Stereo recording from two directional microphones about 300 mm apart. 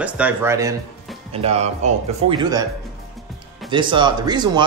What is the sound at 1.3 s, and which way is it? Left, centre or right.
Speech, centre.